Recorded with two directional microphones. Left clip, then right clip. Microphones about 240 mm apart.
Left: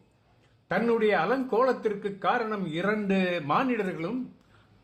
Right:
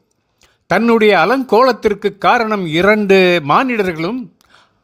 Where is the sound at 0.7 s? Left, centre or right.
Right.